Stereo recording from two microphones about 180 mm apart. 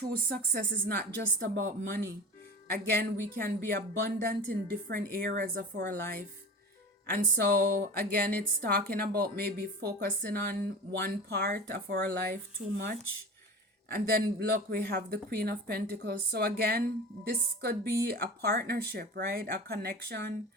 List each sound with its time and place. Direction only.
0.0 s speech: 60° right (ahead or behind)
14.0 s speech: 60° right (ahead or behind)